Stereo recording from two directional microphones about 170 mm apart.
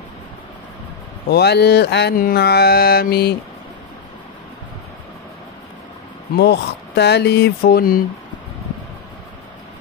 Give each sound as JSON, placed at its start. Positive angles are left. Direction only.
{"t": 1.3, "sound": "music", "side_deg": 75}
{"t": 6.3, "sound": "speech", "side_deg": 80}